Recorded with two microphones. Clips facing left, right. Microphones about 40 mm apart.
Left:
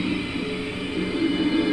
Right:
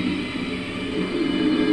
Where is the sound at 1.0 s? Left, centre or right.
Centre.